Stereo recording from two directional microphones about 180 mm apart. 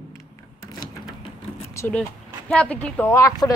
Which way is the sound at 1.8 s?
15° left (ahead or behind).